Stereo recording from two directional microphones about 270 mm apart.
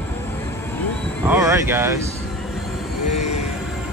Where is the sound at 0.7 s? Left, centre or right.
Centre.